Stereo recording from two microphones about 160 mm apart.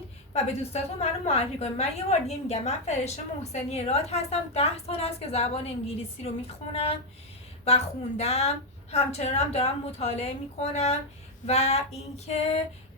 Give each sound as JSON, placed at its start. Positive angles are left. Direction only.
{"t": 0.4, "sound": "a woman's voice", "side_deg": 40}
{"t": 11.4, "sound": "female singing", "side_deg": 40}